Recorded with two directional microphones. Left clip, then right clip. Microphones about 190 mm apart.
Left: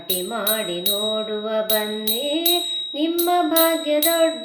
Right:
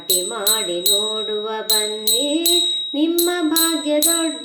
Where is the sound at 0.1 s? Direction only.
40° right (ahead or behind).